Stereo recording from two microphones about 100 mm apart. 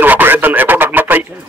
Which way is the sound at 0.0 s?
20° right (ahead or behind).